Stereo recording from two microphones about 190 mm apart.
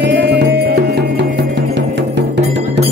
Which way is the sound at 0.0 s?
60° right (ahead or behind).